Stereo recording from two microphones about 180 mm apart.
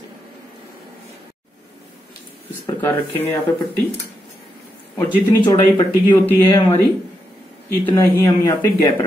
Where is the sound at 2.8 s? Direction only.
15° left (ahead or behind).